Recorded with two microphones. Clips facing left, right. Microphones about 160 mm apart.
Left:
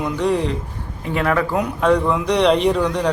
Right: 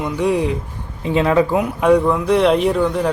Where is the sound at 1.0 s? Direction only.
20° right (ahead or behind).